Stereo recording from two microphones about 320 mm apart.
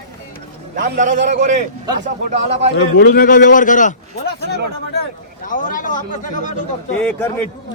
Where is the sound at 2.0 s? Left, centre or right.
Right.